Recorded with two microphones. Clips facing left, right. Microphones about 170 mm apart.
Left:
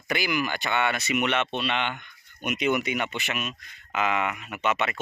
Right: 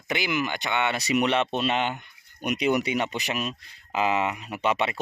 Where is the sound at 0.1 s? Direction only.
20° right (ahead or behind).